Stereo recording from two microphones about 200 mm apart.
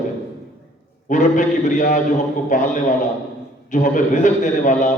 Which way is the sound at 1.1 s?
40° left (ahead or behind).